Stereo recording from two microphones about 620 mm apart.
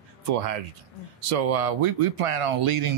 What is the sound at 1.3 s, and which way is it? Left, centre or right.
Speech, right.